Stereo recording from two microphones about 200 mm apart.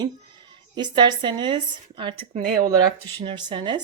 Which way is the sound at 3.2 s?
25° right (ahead or behind).